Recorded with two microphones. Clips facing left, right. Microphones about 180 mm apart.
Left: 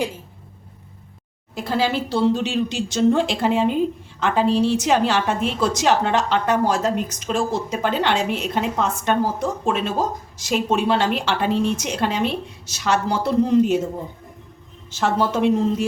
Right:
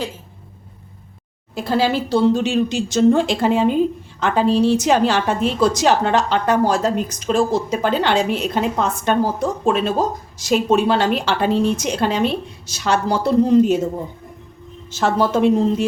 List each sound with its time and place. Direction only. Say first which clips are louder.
1.5 s a woman's voice: right 3 dB; 35° right (ahead or behind)
14.8 s a woman's voice: right 3 dB; 40° right (ahead or behind)